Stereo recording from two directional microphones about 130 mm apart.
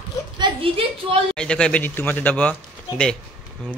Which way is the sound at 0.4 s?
45° right (ahead or behind).